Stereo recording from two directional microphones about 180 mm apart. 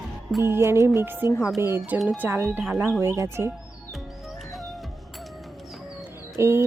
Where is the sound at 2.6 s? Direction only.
Centre (ahead or behind).